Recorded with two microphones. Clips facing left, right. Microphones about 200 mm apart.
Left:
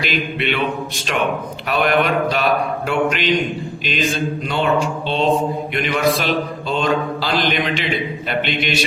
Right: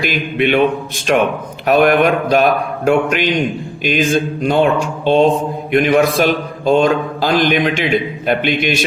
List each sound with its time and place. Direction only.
0.0 s a man's voice: 50° right (ahead or behind)